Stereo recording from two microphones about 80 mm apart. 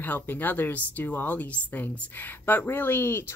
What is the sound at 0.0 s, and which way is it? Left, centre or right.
Speech, left.